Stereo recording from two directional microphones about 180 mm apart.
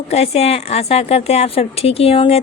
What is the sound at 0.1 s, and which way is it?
A woman's voice, 35° left (ahead or behind).